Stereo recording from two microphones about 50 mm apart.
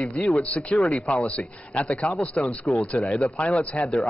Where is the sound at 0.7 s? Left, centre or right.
Left.